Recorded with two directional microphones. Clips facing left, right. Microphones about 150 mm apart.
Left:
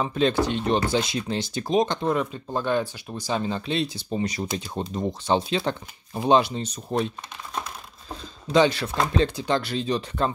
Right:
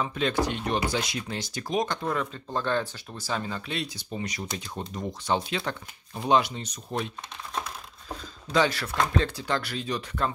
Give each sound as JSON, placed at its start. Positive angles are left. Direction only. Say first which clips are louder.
{"t": 0.0, "sound": "speech", "louder": "left 4 dB", "side_deg": 30}
{"t": 8.2, "sound": "a sound", "louder": "left 5 dB", "side_deg": 20}
{"t": 9.0, "sound": "speech", "louder": "left 4 dB", "side_deg": 20}